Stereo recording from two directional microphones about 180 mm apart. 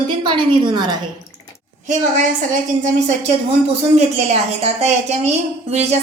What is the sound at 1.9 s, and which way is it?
A woman's voice, 45° right (ahead or behind).